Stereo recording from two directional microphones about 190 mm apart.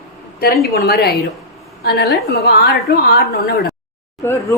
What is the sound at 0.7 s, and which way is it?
A woman's voice, 55° left (ahead or behind).